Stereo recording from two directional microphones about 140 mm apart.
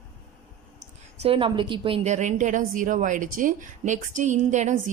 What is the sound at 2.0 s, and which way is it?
A woman's voice, 60° right (ahead or behind).